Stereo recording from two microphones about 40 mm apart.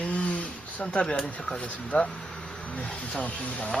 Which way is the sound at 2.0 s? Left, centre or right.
Centre.